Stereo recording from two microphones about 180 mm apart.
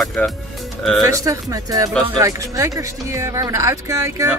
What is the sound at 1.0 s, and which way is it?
Speech, 20° right (ahead or behind).